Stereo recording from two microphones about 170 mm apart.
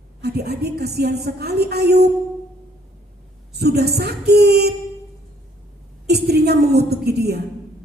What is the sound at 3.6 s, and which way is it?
A woman's voice, 70° right (ahead or behind).